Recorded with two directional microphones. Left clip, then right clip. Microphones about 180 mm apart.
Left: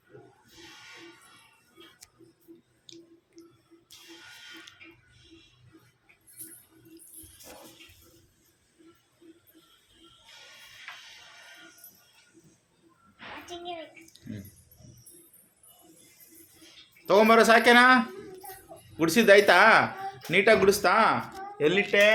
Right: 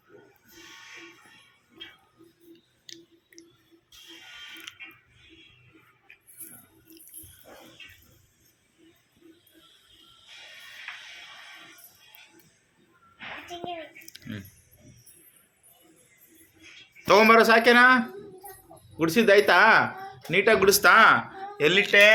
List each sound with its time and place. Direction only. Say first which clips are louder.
2.8 s a sound: right 4 dB; 5° right (ahead or behind)
14.1 s squish: right 6 dB; centre (ahead or behind)
17.1 s a man's voice: right 2 dB; centre (ahead or behind)